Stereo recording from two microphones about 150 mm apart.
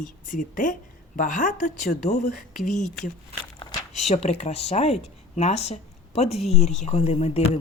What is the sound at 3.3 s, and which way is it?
Speech, 45° right (ahead or behind).